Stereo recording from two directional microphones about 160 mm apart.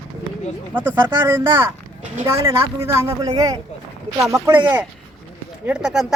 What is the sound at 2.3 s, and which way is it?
Speech, 15° right (ahead or behind).